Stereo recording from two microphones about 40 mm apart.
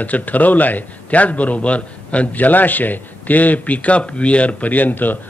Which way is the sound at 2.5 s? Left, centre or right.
Left.